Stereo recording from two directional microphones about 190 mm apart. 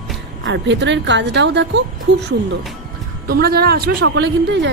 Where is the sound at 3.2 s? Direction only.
55° right (ahead or behind).